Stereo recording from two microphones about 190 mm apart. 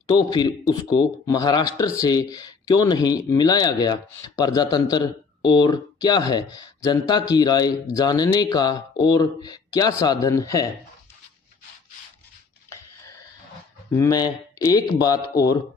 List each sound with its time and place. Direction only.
0.1 s speech: 20° left (ahead or behind)
12.7 s a sound: 15° left (ahead or behind)
13.9 s speech: 20° left (ahead or behind)